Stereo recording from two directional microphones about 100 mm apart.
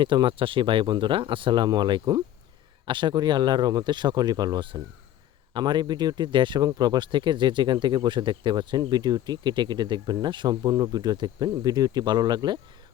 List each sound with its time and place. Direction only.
0.0 s speech: 55° right (ahead or behind)
6.6 s speech: 40° right (ahead or behind)
10.5 s speech: 35° right (ahead or behind)